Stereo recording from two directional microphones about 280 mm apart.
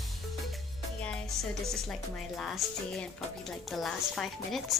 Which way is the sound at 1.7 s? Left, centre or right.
Centre.